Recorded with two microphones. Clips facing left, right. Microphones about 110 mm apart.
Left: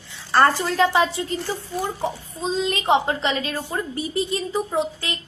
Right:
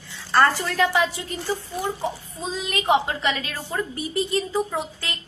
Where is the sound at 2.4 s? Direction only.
25° left (ahead or behind).